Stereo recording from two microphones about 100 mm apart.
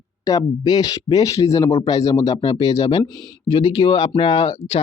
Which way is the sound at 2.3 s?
55° left (ahead or behind).